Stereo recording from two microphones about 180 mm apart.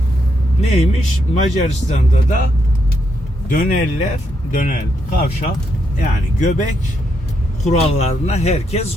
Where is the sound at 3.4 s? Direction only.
45° left (ahead or behind).